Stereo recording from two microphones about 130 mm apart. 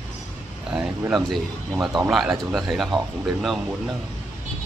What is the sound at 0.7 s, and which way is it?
Speech, 5° right (ahead or behind).